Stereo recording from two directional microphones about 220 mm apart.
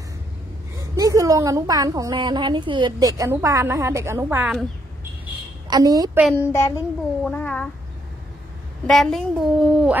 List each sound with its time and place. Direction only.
0.7 s a woman's voice: 15° right (ahead or behind)
5.7 s a woman's voice: 15° right (ahead or behind)
6.3 s a child's voice: 15° left (ahead or behind)
8.8 s a woman's voice: centre (ahead or behind)